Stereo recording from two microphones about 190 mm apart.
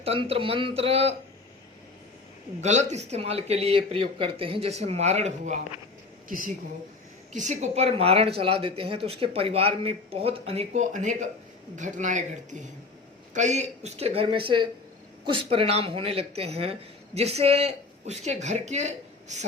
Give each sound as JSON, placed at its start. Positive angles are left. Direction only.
{"t": 0.0, "sound": "speech", "side_deg": -30}
{"t": 2.6, "sound": "a woman's voice", "side_deg": -40}